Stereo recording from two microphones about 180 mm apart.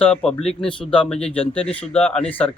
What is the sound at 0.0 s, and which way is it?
A man's voice, 5° left (ahead or behind).